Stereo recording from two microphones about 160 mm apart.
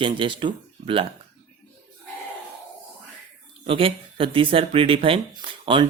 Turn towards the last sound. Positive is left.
turn(degrees=-30)  # may be behind; listen again after turning